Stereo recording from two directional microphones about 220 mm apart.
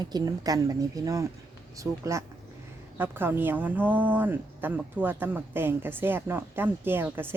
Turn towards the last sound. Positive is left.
turn(degrees=-10)  # may be behind; listen again after turning